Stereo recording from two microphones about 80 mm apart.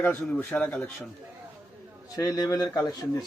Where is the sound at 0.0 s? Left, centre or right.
Centre.